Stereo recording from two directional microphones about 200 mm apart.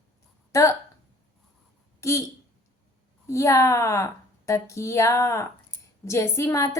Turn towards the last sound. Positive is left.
turn(degrees=15)  # may be behind; listen again after turning